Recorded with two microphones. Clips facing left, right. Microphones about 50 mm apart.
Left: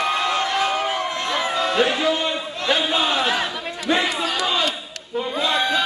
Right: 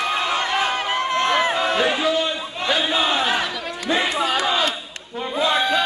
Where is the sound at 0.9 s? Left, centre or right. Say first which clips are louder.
Right 4 dB; right.